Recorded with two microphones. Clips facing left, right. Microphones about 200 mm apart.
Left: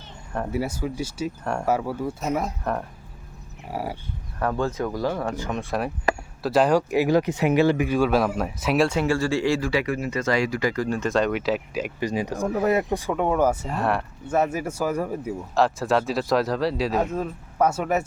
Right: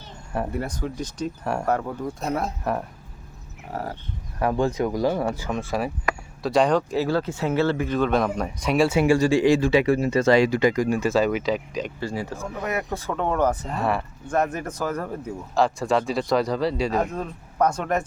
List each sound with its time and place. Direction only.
0.5 s speech: 5° left (ahead or behind)
2.7 s speech: 5° right (ahead or behind)
3.7 s speech: 10° left (ahead or behind)
4.4 s speech: 15° right (ahead or behind)
5.5 s speech: centre (ahead or behind)
11.9 s speech: 15° left (ahead or behind)